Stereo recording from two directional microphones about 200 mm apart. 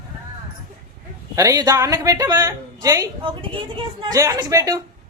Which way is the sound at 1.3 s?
15° right (ahead or behind).